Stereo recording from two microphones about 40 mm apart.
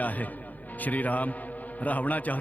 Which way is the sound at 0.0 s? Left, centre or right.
Left.